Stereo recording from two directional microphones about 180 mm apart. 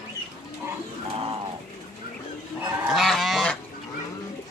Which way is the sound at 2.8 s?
Centre (ahead or behind).